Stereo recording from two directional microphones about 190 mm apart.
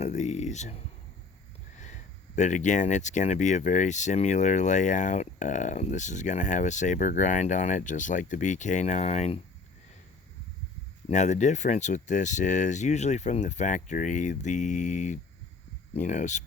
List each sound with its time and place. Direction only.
0.0 s a sound: 40° left (ahead or behind)
1.8 s speech: 40° left (ahead or behind)
11.1 s speech: 40° left (ahead or behind)